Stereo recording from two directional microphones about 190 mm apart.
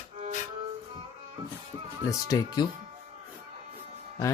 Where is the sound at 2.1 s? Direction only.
20° left (ahead or behind).